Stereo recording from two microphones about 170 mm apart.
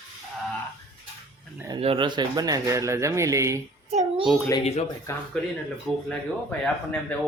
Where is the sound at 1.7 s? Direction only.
30° right (ahead or behind).